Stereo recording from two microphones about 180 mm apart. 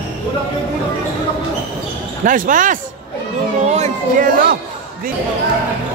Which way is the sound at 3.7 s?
45° right (ahead or behind).